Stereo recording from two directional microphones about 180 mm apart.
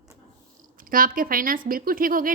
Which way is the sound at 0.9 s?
50° right (ahead or behind).